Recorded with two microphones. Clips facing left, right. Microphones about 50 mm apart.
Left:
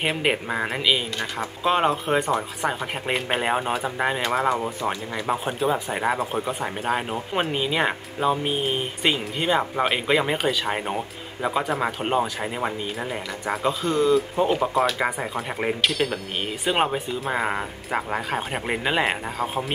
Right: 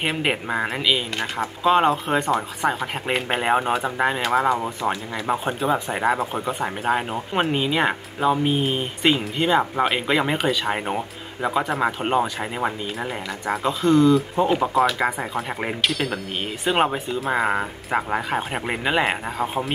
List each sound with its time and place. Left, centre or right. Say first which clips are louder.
0.0 s speech: even; centre
13.5 s speech: right 4 dB; centre
14.5 s speech: right 3 dB; centre